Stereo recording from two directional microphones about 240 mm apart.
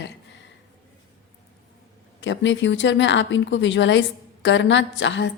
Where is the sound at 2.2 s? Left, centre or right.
Left.